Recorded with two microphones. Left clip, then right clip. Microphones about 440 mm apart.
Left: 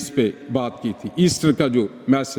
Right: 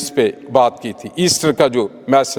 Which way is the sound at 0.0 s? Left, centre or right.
Right.